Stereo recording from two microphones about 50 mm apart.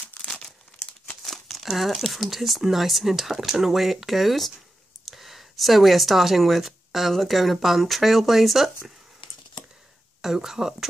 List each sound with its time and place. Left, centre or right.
0.2 s crumpling: centre
1.2 s speech: centre
10.2 s speech: centre